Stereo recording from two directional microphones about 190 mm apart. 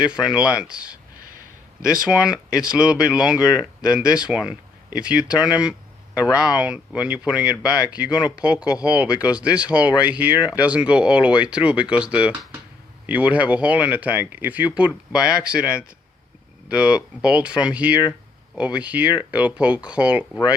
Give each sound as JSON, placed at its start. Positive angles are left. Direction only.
{"t": 0.0, "sound": "speech", "side_deg": -5}
{"t": 2.0, "sound": "speech", "side_deg": -5}